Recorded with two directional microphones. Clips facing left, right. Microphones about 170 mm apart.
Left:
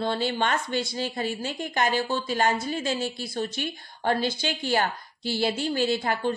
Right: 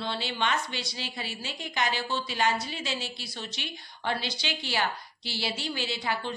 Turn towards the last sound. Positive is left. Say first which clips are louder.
# left 7 dB
turn(degrees=50)  # may be behind; listen again after turning